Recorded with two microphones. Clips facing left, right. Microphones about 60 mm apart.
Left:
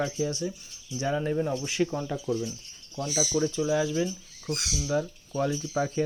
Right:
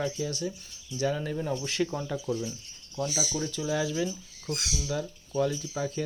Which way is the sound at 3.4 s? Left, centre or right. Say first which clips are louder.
Left 7 dB; left.